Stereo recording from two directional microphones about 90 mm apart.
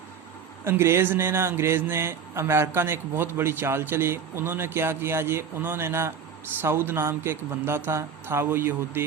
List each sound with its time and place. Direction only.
0.6 s speech: 30° right (ahead or behind)